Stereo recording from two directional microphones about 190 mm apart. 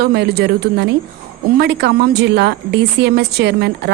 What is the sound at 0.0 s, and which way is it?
A woman's voice, 55° right (ahead or behind).